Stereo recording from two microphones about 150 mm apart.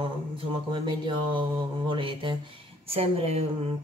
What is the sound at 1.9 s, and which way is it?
Speech, 35° right (ahead or behind).